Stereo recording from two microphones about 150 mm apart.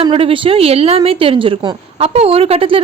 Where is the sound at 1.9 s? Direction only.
40° right (ahead or behind).